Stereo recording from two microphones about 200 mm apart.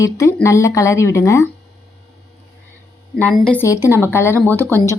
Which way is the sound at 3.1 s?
5° left (ahead or behind).